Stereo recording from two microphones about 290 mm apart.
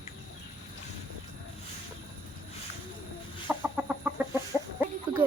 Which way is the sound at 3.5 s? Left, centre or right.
Centre.